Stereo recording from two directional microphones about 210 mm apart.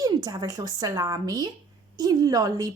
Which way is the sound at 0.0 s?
15° right (ahead or behind).